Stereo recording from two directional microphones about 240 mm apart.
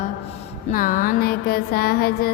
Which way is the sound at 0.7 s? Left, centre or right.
Left.